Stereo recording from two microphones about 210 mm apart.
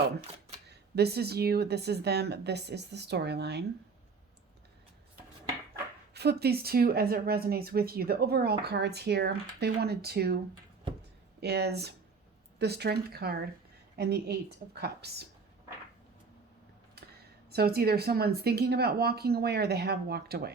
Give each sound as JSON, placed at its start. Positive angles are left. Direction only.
{"t": 0.9, "sound": "a woman's voice", "side_deg": -50}
{"t": 6.1, "sound": "a woman's voice", "side_deg": -50}
{"t": 17.5, "sound": "a woman's voice", "side_deg": -50}